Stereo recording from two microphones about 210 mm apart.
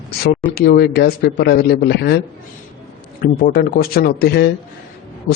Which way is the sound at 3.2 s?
45° left (ahead or behind).